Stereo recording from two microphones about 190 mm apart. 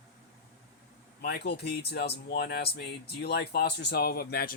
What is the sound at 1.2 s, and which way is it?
Speech, 60° left (ahead or behind).